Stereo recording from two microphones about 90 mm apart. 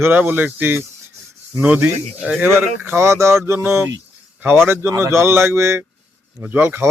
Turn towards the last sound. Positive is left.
turn(degrees=-25)  # may be behind; listen again after turning